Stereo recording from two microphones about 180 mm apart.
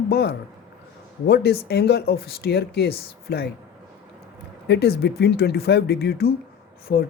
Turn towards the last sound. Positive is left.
turn(degrees=60)  # may be behind; listen again after turning